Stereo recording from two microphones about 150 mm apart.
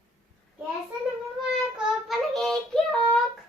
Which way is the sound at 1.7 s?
5° right (ahead or behind).